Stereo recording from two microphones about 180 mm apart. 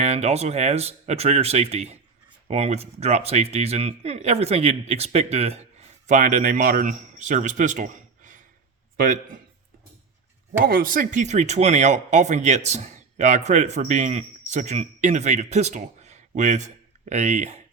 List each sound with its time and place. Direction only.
0.0 s a man's voice: 35° right (ahead or behind)
10.7 s speech: 50° right (ahead or behind)